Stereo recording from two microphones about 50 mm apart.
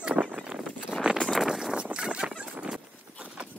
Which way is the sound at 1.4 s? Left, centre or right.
Centre.